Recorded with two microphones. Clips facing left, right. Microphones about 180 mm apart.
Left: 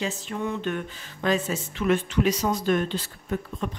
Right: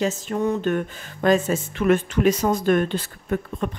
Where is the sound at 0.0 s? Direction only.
45° right (ahead or behind).